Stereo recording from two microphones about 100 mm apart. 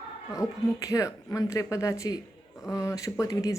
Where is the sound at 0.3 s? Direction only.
35° left (ahead or behind).